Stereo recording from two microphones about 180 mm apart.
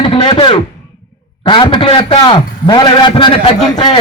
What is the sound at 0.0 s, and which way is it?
A man's voice, 25° left (ahead or behind).